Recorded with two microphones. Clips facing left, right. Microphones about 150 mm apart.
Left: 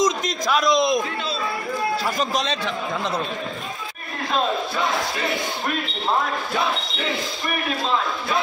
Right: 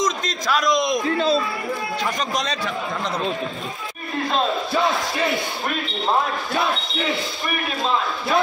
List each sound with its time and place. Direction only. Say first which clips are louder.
0.0 s a man's voice: left 2 dB; 5° left (ahead or behind)
0.7 s a man's voice: left 2 dB; 30° left (ahead or behind)